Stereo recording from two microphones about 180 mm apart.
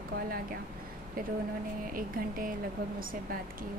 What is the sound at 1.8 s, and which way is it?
Speech, 50° right (ahead or behind).